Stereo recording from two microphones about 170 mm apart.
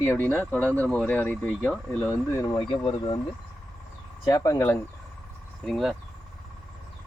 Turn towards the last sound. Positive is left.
turn(degrees=0)  # may be behind; listen again after turning